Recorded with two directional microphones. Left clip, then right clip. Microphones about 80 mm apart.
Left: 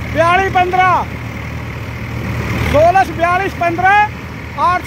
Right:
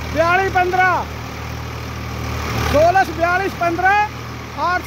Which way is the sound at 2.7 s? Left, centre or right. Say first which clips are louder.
Left 4 dB; centre.